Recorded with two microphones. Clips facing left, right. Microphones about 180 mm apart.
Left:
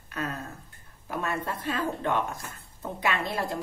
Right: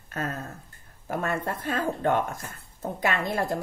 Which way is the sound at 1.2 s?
50° right (ahead or behind).